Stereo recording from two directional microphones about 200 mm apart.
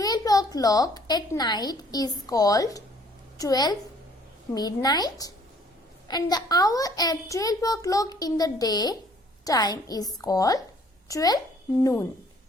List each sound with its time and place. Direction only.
0.0 s a woman's voice: 20° left (ahead or behind)